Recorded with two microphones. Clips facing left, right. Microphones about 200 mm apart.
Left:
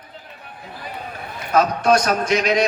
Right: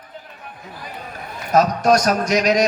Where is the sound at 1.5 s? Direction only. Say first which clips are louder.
Right 1 dB; 40° right (ahead or behind).